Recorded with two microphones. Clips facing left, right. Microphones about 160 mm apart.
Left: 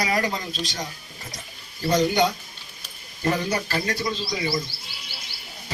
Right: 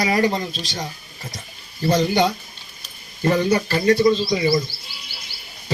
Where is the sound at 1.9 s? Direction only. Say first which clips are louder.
Right 2 dB; 30° right (ahead or behind).